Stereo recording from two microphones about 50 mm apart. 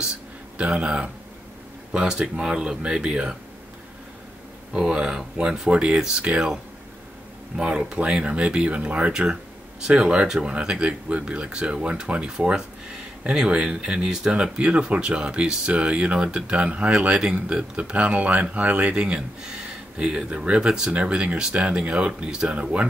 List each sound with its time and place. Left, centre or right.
0.6 s speech: right
4.7 s speech: centre
7.5 s speech: centre